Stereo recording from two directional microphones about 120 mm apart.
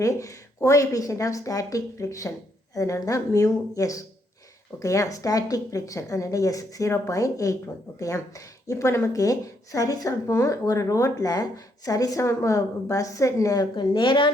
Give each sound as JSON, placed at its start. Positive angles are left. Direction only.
{"t": 0.0, "sound": "speech", "side_deg": 25}